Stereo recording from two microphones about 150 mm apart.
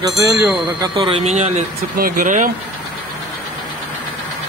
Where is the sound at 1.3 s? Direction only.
50° right (ahead or behind).